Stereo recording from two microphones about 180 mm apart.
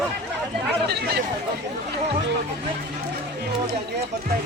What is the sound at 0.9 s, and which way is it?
Speech, 65° right (ahead or behind).